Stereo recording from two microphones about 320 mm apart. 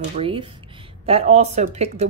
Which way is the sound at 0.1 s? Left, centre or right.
Centre.